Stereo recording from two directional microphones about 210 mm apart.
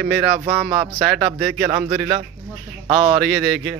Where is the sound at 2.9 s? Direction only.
20° right (ahead or behind).